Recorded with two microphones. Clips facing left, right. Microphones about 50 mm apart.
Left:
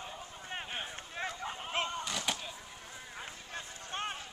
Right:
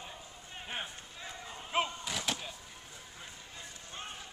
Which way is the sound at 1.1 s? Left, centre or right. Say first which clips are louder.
Left 7 dB; left.